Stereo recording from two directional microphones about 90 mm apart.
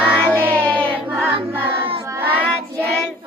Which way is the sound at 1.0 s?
20° right (ahead or behind).